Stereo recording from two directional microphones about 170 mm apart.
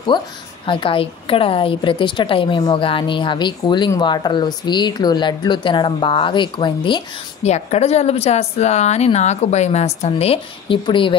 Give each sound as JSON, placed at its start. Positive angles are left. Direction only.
{"t": 0.1, "sound": "a woman's voice", "side_deg": 25}
{"t": 7.4, "sound": "a woman's voice", "side_deg": 40}